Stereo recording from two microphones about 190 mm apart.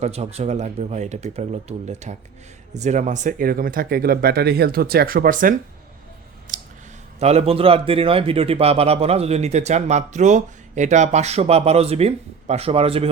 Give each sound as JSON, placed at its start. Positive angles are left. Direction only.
{"t": 0.0, "sound": "speech", "side_deg": -35}
{"t": 6.5, "sound": "clicking", "side_deg": -45}
{"t": 7.2, "sound": "speech", "side_deg": -35}